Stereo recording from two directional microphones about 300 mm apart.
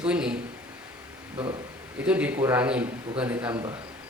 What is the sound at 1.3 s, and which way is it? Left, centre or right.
Speech, centre.